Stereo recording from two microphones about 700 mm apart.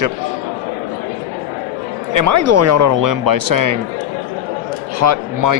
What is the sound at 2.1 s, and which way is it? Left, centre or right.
A man's voice, right.